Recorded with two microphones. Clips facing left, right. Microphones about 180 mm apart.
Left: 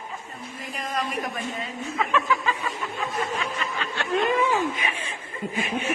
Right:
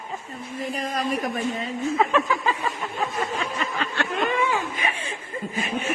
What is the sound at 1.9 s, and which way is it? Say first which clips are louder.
Chuckle: right 2 dB; 35° right (ahead or behind).